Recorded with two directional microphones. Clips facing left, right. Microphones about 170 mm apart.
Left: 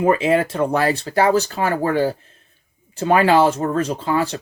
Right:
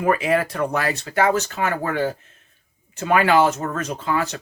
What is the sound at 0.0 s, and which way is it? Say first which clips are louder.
Speech: left 3 dB; 25° left (ahead or behind).